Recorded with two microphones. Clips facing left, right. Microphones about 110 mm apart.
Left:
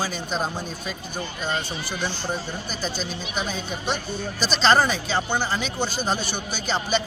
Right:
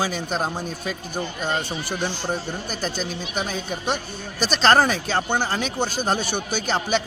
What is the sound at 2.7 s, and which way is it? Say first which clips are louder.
A man's voice: right 2 dB; 55° right (ahead or behind).